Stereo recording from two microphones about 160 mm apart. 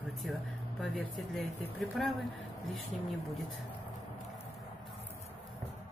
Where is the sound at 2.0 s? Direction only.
Centre (ahead or behind).